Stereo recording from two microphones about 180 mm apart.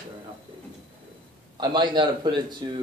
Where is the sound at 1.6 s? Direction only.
25° right (ahead or behind).